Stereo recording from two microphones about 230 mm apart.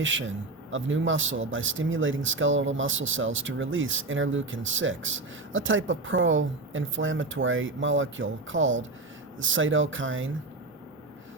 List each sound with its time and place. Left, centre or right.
0.0 s speech: right